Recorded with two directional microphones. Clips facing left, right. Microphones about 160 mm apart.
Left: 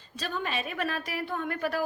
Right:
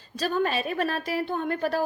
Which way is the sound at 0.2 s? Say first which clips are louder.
Right 7 dB; 40° right (ahead or behind).